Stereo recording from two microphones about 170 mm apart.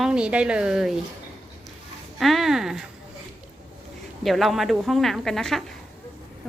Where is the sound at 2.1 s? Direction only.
Centre (ahead or behind).